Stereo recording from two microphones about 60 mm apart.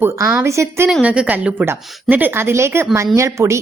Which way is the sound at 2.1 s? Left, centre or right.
Right.